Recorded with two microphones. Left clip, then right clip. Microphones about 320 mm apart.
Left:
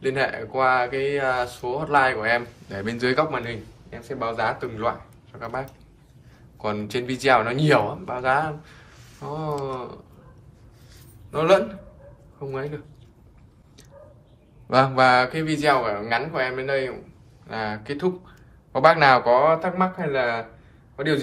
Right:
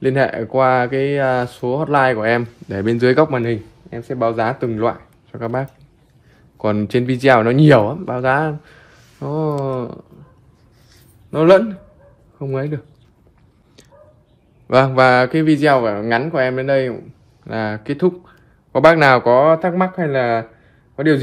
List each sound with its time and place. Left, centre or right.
0.0 s speech: right
11.3 s speech: right
14.7 s speech: right